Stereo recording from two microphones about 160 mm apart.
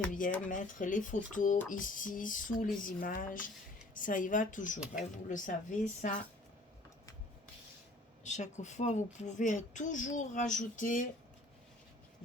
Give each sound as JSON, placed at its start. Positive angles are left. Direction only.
{"t": 0.4, "sound": "speech", "side_deg": 55}
{"t": 8.2, "sound": "speech", "side_deg": 50}